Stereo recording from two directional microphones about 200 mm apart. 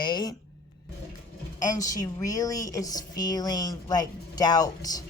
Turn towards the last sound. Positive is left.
turn(degrees=20)  # may be behind; listen again after turning